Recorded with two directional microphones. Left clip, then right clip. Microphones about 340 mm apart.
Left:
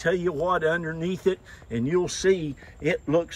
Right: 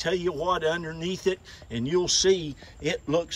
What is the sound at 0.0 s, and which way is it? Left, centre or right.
Speech, centre.